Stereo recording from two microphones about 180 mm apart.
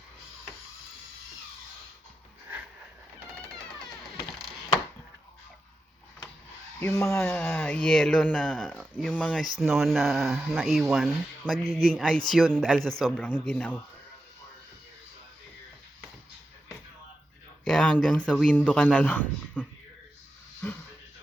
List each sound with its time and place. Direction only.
6.7 s speech: 15° left (ahead or behind)
17.7 s speech: 5° left (ahead or behind)